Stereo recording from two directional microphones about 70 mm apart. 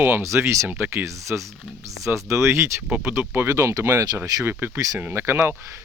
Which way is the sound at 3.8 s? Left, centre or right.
Right.